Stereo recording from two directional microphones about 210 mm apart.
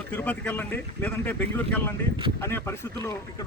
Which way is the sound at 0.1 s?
5° left (ahead or behind).